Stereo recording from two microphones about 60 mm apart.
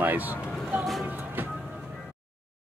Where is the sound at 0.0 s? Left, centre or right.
Right.